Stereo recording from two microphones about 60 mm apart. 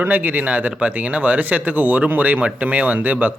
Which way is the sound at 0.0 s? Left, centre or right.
Right.